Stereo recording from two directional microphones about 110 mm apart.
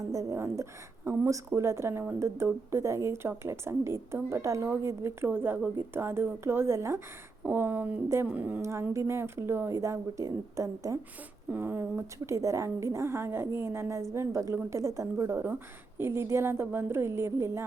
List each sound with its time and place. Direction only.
0.1 s speech: 30° right (ahead or behind)
7.4 s a sound: 15° right (ahead or behind)
8.6 s speech: 25° right (ahead or behind)
11.5 s speech: 20° right (ahead or behind)